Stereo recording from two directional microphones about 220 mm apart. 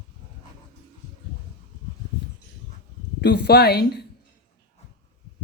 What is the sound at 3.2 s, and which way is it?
Speech, 50° left (ahead or behind).